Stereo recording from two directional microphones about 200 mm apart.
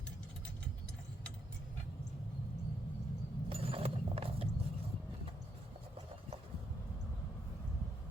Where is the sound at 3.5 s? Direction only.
30° right (ahead or behind).